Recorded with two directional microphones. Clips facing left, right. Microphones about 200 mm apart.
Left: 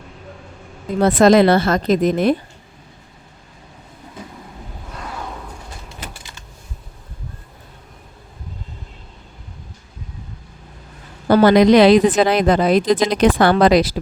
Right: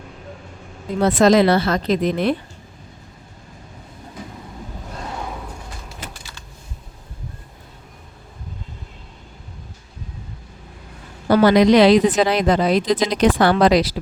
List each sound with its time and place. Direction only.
1.0 s a woman's voice: 55° left (ahead or behind)
11.3 s a woman's voice: 50° left (ahead or behind)